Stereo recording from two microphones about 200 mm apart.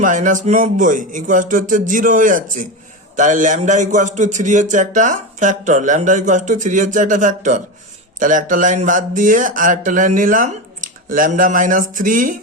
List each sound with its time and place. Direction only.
0.0 s a man's voice: 40° right (ahead or behind)